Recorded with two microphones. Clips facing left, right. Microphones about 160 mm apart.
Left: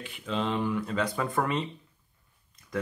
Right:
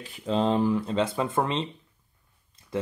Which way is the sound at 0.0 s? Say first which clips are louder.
Right 6 dB; 35° right (ahead or behind).